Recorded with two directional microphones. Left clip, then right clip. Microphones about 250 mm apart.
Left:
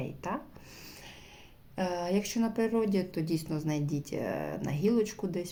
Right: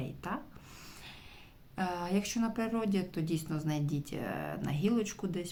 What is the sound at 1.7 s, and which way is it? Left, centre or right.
Speech, centre.